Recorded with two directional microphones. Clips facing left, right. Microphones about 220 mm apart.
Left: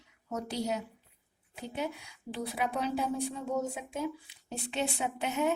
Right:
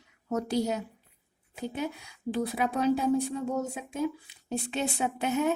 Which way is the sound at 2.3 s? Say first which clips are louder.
Right 5 dB; 45° right (ahead or behind).